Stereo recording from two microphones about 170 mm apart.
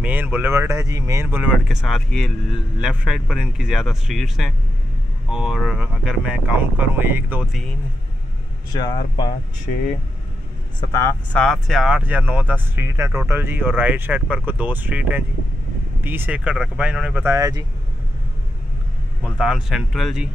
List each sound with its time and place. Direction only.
0.0 s speech: 10° right (ahead or behind)
8.7 s speech: 25° left (ahead or behind)
9.7 s speech: 50° left (ahead or behind)
10.8 s speech: 15° left (ahead or behind)
11.4 s speech: centre (ahead or behind); by 17.6 s 20° right (ahead or behind)
19.2 s speech: 5° right (ahead or behind)